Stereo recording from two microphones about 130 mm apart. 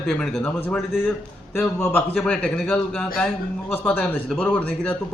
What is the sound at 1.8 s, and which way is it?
A man's voice, 15° left (ahead or behind).